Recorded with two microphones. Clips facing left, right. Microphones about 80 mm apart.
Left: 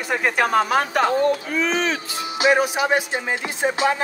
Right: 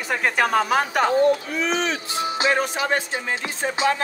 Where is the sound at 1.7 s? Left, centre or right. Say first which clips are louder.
Left 1 dB; left.